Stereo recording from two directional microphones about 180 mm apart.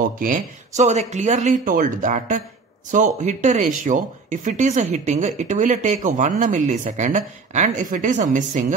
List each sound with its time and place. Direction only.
0.2 s speech: 45° right (ahead or behind)